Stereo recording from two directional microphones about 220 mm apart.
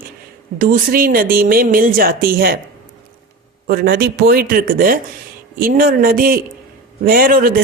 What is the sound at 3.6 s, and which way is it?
A woman's voice, 45° right (ahead or behind).